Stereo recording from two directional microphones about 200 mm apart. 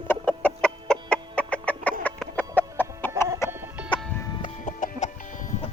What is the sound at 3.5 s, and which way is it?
Music, 10° right (ahead or behind).